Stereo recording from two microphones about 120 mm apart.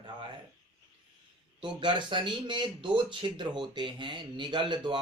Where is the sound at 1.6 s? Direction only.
40° right (ahead or behind).